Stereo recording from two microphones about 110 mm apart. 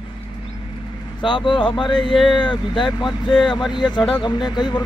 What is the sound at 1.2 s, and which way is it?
Speech, 50° left (ahead or behind).